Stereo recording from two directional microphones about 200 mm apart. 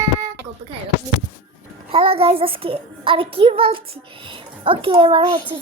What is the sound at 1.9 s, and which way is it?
Speech, 30° right (ahead or behind).